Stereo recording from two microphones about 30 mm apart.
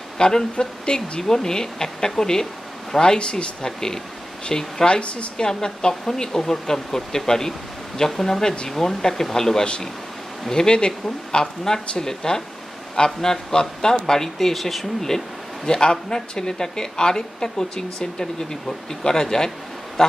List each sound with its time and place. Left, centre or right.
0.2 s speech: left
1.2 s speech: centre
3.2 s speech: left
3.6 s speech: left
4.8 s speech: left
5.4 s speech: left
10.9 s speech: centre
14.5 s speech: centre
15.0 s speech: centre